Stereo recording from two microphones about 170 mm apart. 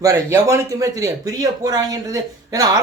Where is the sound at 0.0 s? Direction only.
20° right (ahead or behind).